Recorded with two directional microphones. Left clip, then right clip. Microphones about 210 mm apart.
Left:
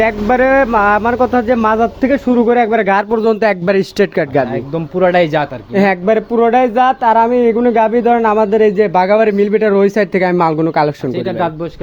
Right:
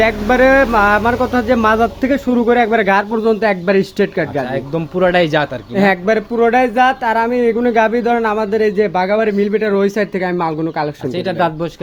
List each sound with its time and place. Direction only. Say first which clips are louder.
0.0 s speech: even; 30° left (ahead or behind)
4.9 s speech: left 2 dB; 5° left (ahead or behind)
5.7 s speech: left 2 dB; 25° left (ahead or behind)